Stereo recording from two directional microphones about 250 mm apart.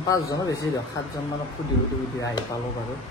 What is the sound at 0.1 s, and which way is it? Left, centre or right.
Speech, centre.